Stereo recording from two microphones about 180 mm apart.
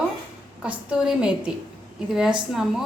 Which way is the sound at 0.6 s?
5° right (ahead or behind).